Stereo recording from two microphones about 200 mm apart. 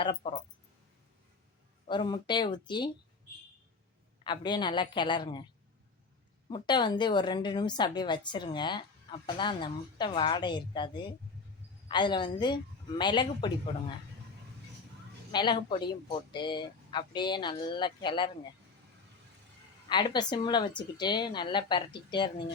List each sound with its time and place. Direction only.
0.0 s a woman's voice: 25° left (ahead or behind)
1.9 s a woman's voice: 20° left (ahead or behind)
4.2 s a woman's voice: 20° left (ahead or behind)
6.5 s a woman's voice: 20° left (ahead or behind)
15.3 s a woman's voice: 20° left (ahead or behind)
19.9 s a woman's voice: 20° left (ahead or behind)